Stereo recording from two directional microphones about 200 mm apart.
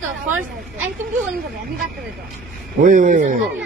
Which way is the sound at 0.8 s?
5° right (ahead or behind).